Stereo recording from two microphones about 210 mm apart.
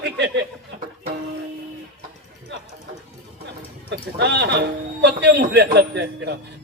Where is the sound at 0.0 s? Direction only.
55° right (ahead or behind).